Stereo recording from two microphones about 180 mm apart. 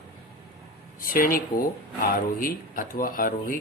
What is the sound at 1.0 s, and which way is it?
Speech, 55° left (ahead or behind).